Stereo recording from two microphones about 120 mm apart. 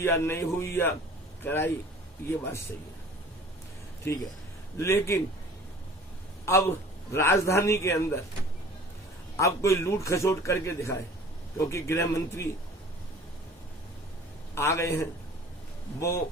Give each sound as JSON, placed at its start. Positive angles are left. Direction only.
{"t": 0.0, "sound": "speech", "side_deg": 20}
{"t": 4.1, "sound": "speech", "side_deg": 20}
{"t": 6.4, "sound": "speech", "side_deg": 20}
{"t": 9.4, "sound": "speech", "side_deg": 25}
{"t": 14.5, "sound": "speech", "side_deg": 20}